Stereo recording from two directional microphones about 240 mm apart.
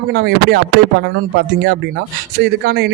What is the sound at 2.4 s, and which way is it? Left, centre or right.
Speech, right.